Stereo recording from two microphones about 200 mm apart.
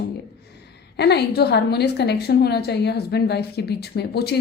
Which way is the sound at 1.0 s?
55° left (ahead or behind).